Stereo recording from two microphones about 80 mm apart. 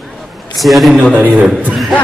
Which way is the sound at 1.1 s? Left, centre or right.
Right.